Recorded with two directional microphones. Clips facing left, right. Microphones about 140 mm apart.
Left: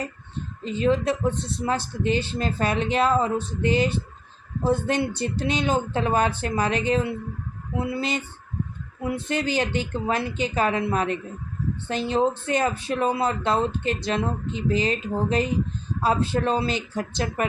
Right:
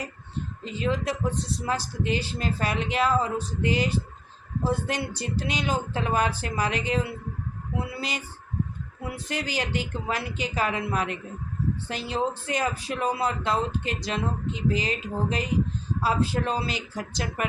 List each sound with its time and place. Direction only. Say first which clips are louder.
0.6 s speech: left 6 dB; 25° left (ahead or behind)
9.0 s speech: left 6 dB; 25° left (ahead or behind)